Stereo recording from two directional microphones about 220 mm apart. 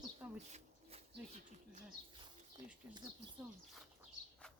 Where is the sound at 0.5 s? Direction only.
30° right (ahead or behind).